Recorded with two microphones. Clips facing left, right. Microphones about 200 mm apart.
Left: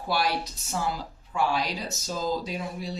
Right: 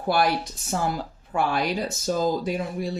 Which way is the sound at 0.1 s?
55° right (ahead or behind).